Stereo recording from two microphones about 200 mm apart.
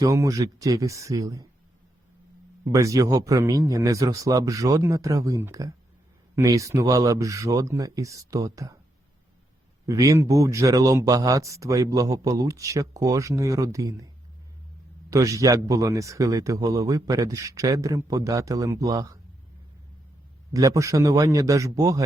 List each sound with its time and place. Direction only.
0.0 s a man's voice: 15° right (ahead or behind)
2.7 s a man's voice: 15° right (ahead or behind)
9.8 s a man's voice: 15° right (ahead or behind)
15.1 s a man's voice: 15° right (ahead or behind)
20.5 s a man's voice: 15° right (ahead or behind)